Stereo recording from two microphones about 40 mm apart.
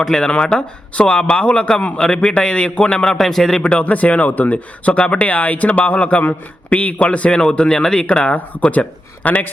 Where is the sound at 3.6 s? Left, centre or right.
Left.